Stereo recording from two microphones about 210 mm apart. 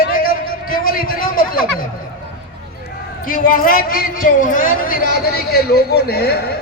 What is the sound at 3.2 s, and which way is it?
A man's voice, 40° left (ahead or behind).